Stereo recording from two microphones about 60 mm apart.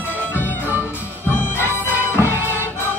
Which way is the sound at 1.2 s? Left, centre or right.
Left.